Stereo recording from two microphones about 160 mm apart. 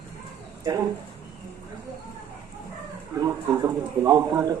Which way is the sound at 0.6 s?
25° right (ahead or behind).